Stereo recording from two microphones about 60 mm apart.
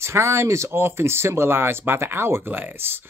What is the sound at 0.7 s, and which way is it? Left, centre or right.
Speech, right.